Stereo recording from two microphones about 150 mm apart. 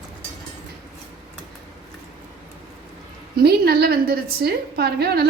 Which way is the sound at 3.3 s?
90° right.